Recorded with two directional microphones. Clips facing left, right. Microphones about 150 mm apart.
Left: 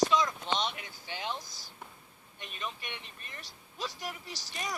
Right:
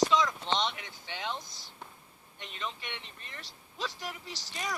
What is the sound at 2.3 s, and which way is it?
Speech, 25° right (ahead or behind).